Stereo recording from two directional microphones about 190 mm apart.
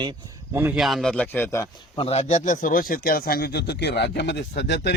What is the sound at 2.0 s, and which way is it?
Speech, 35° left (ahead or behind).